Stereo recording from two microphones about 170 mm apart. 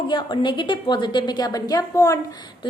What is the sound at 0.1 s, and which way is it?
A woman's voice, 25° left (ahead or behind).